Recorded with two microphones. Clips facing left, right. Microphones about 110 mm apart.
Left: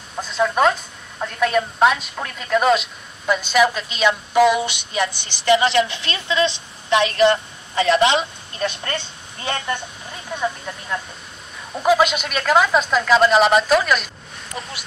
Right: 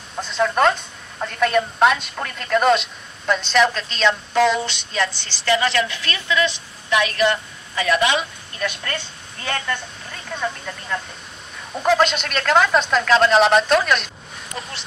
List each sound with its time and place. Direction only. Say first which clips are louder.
0.1 s a woman's voice: even; centre (ahead or behind); by 10.2 s 25° left (ahead or behind)
10.3 s a woman's voice: left 2 dB; 5° left (ahead or behind)